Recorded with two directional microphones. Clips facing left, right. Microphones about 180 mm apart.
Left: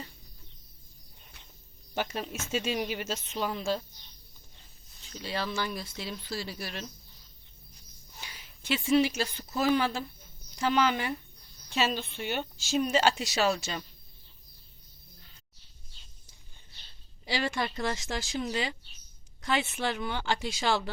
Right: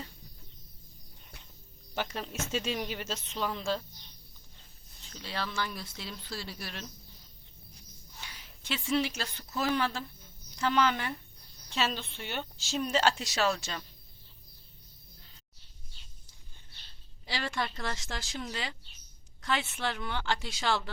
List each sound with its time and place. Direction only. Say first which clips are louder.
2.0 s a woman's voice: left 2 dB; 5° left (ahead or behind)
5.2 s speech: left 3 dB; 5° left (ahead or behind)
8.2 s a woman's voice: left 1 dB; 10° left (ahead or behind)
17.2 s a woman's voice: left 4 dB; 10° left (ahead or behind)